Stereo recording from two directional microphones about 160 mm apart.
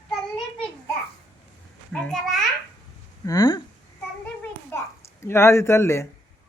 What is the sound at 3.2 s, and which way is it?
Speech, 20° left (ahead or behind).